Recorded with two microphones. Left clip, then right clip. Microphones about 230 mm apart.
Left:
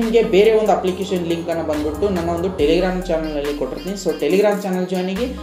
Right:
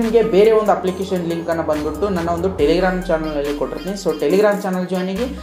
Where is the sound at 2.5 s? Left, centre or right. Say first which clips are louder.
Even; centre.